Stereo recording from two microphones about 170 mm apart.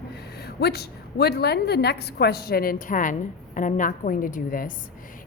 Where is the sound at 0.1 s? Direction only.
70° left (ahead or behind).